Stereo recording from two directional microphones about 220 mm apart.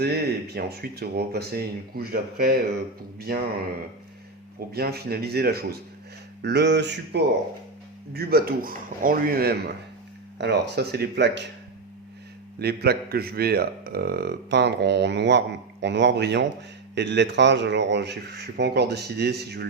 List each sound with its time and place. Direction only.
0.0 s a man's voice: 45° right (ahead or behind)
4.7 s a man's voice: 45° right (ahead or behind)
12.5 s a man's voice: 45° right (ahead or behind)